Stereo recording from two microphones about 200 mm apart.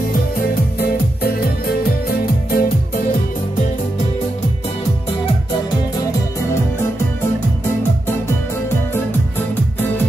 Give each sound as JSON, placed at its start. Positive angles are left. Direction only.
{"t": 0.7, "sound": "music", "side_deg": 50}